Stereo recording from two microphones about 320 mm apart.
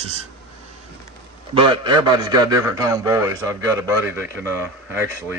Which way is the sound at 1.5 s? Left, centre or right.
Centre.